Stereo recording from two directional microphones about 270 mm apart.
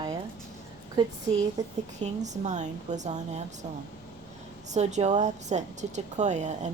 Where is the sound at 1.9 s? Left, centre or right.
Right.